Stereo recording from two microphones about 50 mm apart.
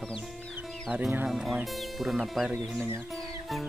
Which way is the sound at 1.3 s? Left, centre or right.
Centre.